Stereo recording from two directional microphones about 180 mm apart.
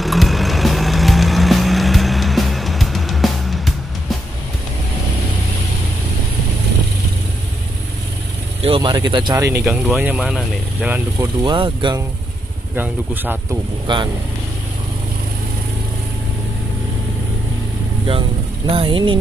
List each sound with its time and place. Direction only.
0.0 s music: centre (ahead or behind)
8.6 s speech: 30° right (ahead or behind)
9.7 s speech: 5° right (ahead or behind)
11.1 s speech: 30° right (ahead or behind)
12.7 s speech: 10° right (ahead or behind)
13.9 s speech: 25° right (ahead or behind)
18.7 s speech: 30° right (ahead or behind)